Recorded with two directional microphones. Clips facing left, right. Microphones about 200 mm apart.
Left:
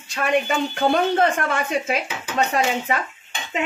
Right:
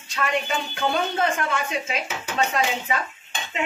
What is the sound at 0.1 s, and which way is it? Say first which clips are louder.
Speech: left 4 dB; 50° left (ahead or behind).